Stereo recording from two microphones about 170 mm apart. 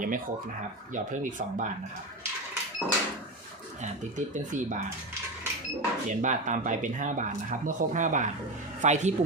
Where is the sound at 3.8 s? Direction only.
45° right (ahead or behind).